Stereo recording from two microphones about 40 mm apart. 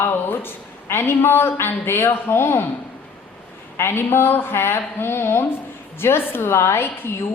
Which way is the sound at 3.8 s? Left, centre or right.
Left.